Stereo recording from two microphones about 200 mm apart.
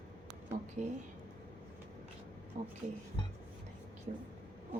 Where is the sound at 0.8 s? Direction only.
35° right (ahead or behind).